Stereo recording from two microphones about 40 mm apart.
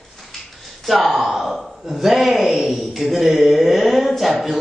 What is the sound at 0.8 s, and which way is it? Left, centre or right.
A woman's voice, centre.